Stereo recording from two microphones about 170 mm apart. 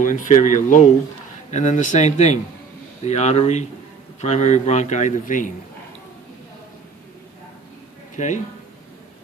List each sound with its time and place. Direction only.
0.0 s a man's voice: 50° left (ahead or behind)
8.1 s speech: 45° left (ahead or behind)